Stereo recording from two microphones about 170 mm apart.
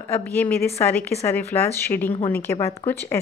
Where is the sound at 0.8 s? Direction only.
10° left (ahead or behind).